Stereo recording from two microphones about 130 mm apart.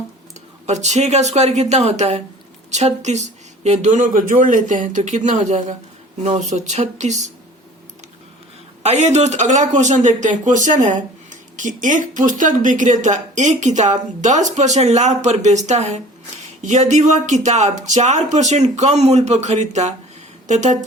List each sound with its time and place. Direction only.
0.7 s speech: 60° right (ahead or behind)
8.8 s speech: 60° right (ahead or behind)